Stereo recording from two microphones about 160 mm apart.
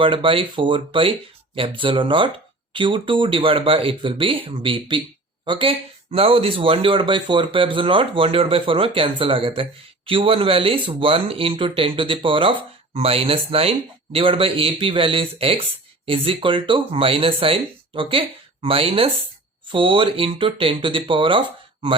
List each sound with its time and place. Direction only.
0.0 s speech: 35° right (ahead or behind)